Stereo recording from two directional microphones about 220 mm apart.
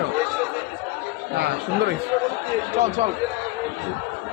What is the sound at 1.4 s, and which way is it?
Speech, 50° right (ahead or behind).